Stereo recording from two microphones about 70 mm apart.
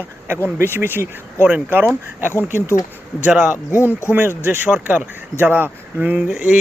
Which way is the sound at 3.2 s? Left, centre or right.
Centre.